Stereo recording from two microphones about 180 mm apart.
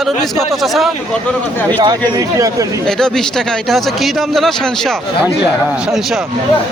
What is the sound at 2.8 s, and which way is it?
A man's voice, 5° left (ahead or behind).